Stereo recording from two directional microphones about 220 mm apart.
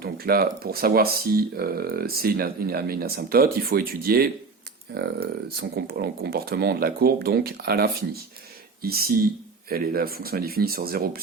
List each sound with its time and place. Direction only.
0.0 s speech: 45° right (ahead or behind)